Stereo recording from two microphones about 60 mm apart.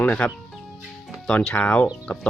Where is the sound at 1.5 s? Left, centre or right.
Left.